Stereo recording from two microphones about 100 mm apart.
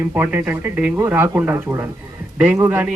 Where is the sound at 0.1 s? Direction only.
15° right (ahead or behind).